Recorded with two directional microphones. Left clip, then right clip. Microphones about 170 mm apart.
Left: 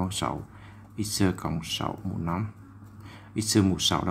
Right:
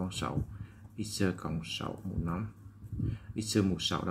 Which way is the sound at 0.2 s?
20° left (ahead or behind).